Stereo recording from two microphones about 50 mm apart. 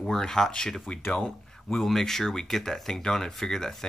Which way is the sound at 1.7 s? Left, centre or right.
Centre.